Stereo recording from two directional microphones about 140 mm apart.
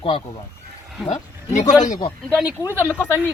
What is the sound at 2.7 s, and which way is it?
Speech, 15° right (ahead or behind).